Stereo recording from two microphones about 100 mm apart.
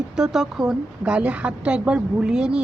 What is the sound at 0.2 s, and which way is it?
A woman's voice, 5° right (ahead or behind).